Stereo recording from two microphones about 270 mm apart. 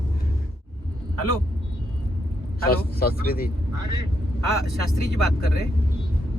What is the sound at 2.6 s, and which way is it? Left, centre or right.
Speech, left.